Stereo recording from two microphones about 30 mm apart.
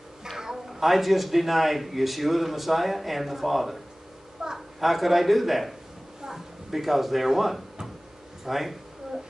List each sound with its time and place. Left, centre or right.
0.7 s a man's voice: centre
4.4 s a sound: centre
4.7 s a man's voice: centre